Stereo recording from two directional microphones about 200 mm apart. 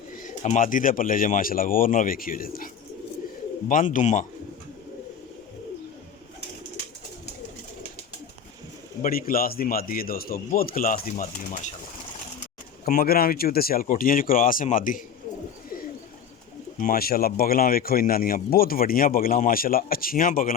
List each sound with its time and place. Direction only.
0.2 s speech: 40° left (ahead or behind)
3.7 s speech: 40° left (ahead or behind)
9.0 s speech: 45° left (ahead or behind)
12.8 s speech: 50° left (ahead or behind)
16.7 s speech: 45° left (ahead or behind)